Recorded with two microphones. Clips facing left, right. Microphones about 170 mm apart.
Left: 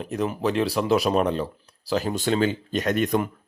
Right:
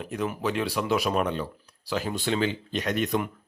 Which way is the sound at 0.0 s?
35° left (ahead or behind).